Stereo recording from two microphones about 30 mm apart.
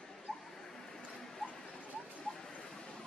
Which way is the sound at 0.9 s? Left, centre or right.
Centre.